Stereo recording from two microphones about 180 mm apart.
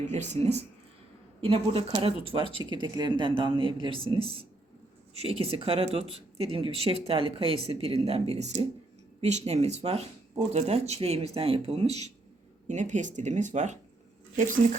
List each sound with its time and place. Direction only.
0.1 s speech: 40° right (ahead or behind)